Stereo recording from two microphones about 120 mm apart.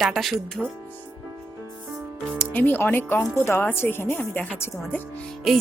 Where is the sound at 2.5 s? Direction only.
15° left (ahead or behind).